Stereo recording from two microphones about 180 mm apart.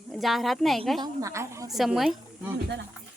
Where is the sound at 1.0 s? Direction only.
20° right (ahead or behind).